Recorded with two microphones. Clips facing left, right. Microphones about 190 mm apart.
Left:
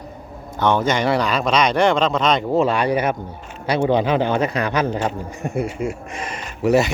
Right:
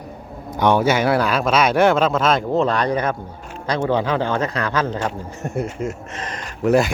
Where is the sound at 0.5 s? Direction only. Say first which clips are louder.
Right 2 dB; 10° right (ahead or behind).